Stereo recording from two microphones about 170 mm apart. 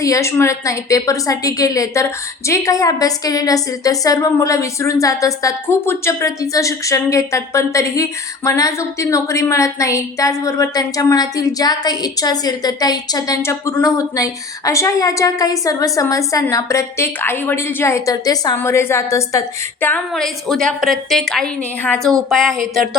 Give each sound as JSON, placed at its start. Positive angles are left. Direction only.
{"t": 0.0, "sound": "a woman's voice", "side_deg": 20}